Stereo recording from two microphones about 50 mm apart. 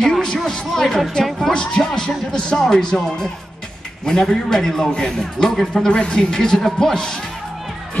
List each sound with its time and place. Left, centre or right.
0.0 s a sound: centre
0.5 s a man's voice: centre
1.5 s a man's voice: centre